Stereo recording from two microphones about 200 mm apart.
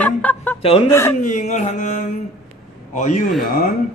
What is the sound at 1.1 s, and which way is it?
Speech, 40° left (ahead or behind).